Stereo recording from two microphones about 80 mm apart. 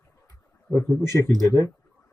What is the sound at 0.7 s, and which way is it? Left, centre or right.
Speech, left.